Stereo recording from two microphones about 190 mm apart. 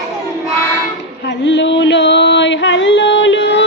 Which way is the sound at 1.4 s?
70° left (ahead or behind).